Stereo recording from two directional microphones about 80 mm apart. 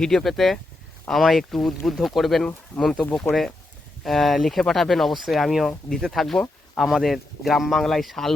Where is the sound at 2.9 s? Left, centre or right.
Centre.